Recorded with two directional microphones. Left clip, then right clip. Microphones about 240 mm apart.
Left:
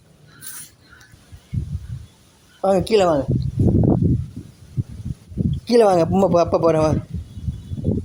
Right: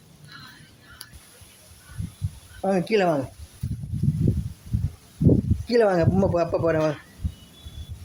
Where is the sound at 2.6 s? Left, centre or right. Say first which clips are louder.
Left 6 dB; left.